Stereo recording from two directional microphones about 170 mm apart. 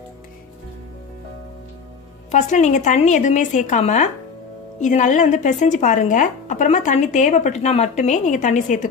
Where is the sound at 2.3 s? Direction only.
45° left (ahead or behind).